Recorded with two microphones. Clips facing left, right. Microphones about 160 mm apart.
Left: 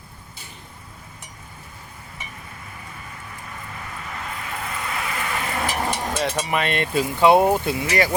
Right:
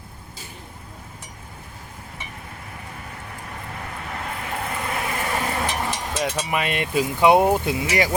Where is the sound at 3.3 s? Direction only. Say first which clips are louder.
Right 2 dB; 60° right (ahead or behind).